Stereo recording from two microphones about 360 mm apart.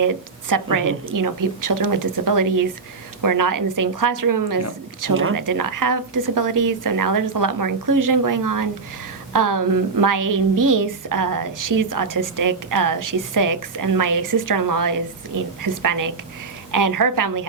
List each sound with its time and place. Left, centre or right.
0.0 s a woman's voice: right